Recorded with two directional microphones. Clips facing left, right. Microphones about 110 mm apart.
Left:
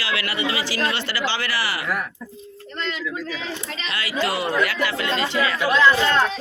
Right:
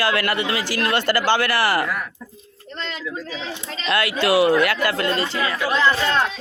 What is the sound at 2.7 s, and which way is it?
Speech, 30° right (ahead or behind).